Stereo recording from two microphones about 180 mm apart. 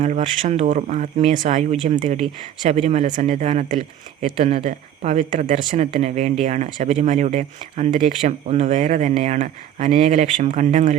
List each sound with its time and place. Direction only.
0.0 s speech: 40° right (ahead or behind)
2.1 s speech: centre (ahead or behind)
2.6 s speech: 35° right (ahead or behind)